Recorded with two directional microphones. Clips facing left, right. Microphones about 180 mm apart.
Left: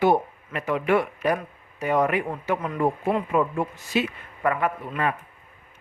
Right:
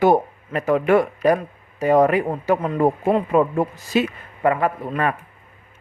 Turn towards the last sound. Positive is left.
turn(degrees=-50)  # may be behind; listen again after turning